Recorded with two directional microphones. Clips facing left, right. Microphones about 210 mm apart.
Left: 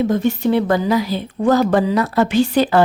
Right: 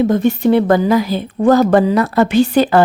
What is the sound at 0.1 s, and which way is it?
A woman's voice, 55° right (ahead or behind).